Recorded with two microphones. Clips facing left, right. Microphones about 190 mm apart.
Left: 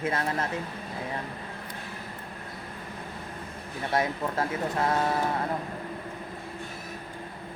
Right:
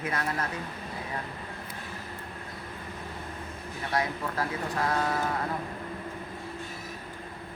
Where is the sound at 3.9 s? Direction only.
25° left (ahead or behind).